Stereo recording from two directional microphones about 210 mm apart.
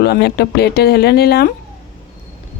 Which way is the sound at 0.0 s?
50° left (ahead or behind).